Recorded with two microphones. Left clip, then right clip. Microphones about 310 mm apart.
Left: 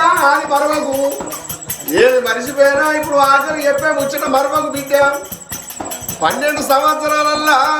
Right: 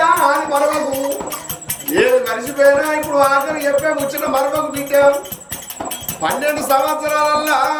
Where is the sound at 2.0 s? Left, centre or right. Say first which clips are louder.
Left 2 dB; centre.